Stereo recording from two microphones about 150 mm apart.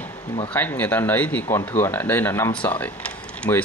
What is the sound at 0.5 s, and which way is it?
Speech, 10° left (ahead or behind).